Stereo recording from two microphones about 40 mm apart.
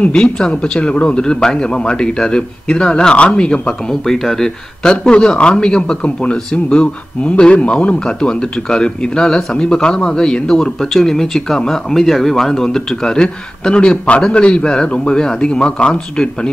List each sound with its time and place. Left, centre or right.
0.1 s a man's voice: left
3.9 s a man's voice: centre